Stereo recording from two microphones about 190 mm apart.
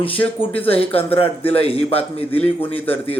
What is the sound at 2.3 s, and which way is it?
Speech, 10° left (ahead or behind).